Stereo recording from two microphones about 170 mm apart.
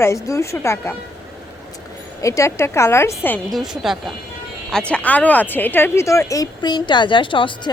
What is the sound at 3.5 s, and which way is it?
Speech, centre (ahead or behind).